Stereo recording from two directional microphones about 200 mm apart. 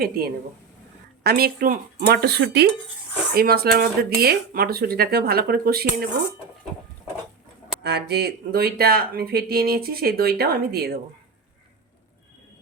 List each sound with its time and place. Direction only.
1.2 s speech: 50° right (ahead or behind)
7.9 s speech: 55° right (ahead or behind)